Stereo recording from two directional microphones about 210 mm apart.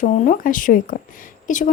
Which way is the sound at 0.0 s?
40° left (ahead or behind).